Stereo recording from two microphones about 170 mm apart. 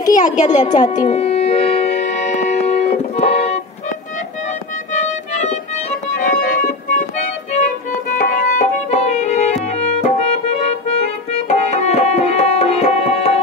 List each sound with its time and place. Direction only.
0.1 s a child's voice: 45° left (ahead or behind)
0.9 s music: 40° left (ahead or behind)
4.9 s music: 40° left (ahead or behind)
11.4 s tabla: 40° left (ahead or behind)